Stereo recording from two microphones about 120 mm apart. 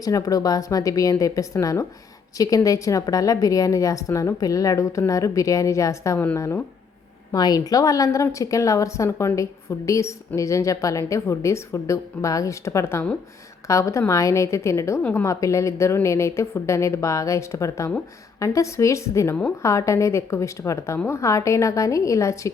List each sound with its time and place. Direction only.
0.0 s a woman's voice: 30° left (ahead or behind)